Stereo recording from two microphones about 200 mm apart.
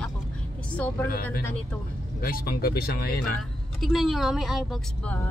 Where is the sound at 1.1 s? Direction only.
50° left (ahead or behind).